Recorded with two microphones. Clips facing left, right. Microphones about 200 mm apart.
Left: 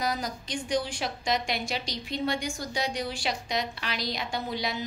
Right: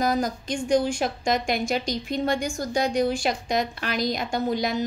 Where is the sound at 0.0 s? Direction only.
50° right (ahead or behind).